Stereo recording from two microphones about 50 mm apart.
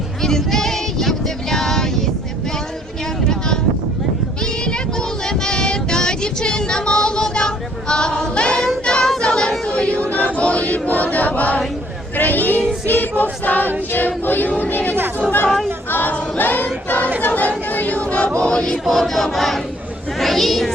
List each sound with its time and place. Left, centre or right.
0.2 s a sound: centre
5.4 s child singing: centre
9.7 s choir: left
15.4 s choir: centre
15.9 s choir: left
17.7 s a sound: left
18.3 s choir: centre
18.9 s choir: centre
20.1 s speech: centre